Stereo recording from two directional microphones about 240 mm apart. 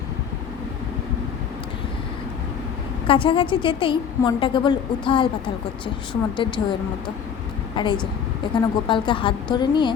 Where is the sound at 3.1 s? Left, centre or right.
Left.